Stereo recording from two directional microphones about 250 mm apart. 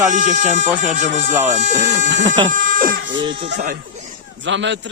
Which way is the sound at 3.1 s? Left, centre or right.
Centre.